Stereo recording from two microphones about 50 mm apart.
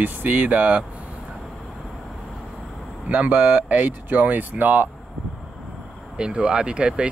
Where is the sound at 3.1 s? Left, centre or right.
Right.